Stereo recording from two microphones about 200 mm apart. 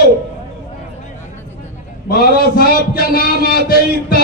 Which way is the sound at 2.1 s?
50° left (ahead or behind).